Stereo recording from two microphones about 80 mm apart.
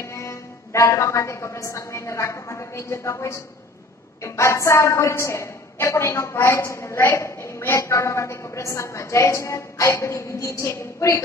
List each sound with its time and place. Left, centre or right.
0.0 s a woman's voice: left